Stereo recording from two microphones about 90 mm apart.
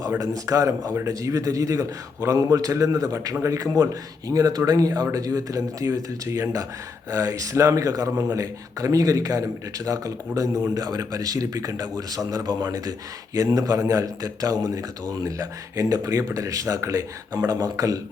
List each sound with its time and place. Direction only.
0.2 s speech: 40° right (ahead or behind)